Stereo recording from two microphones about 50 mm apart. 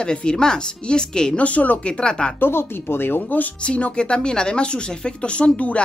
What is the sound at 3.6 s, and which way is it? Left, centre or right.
Speech, left.